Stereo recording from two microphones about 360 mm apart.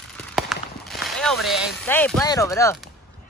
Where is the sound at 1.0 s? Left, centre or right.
Centre.